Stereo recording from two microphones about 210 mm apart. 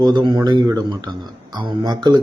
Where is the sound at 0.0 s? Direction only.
20° right (ahead or behind).